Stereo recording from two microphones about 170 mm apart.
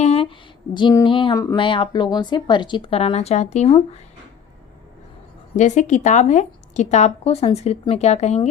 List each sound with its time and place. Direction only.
0.0 s speech: 35° left (ahead or behind)
5.5 s a woman's voice: 45° left (ahead or behind)